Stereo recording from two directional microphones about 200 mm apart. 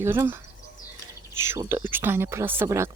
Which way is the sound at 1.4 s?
10° right (ahead or behind).